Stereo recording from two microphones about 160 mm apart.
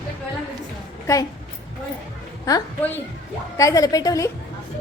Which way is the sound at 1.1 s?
20° left (ahead or behind).